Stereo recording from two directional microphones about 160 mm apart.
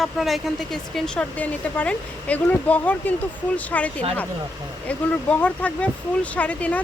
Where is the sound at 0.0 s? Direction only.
Centre (ahead or behind).